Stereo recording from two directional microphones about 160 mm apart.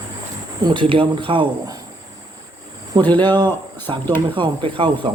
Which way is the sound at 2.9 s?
25° right (ahead or behind).